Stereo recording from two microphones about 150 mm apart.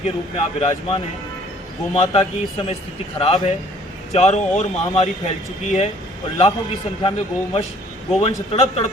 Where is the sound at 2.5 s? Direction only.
40° left (ahead or behind).